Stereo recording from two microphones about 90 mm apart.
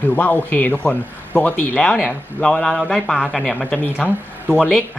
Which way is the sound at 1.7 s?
10° left (ahead or behind).